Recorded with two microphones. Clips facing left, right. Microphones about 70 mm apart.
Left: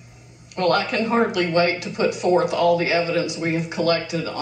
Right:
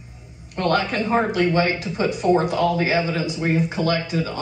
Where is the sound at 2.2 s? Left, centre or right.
Left.